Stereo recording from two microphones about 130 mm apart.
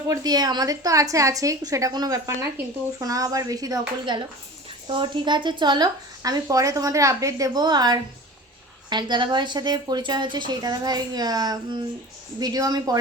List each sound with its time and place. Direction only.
0.1 s a woman's voice: 30° right (ahead or behind)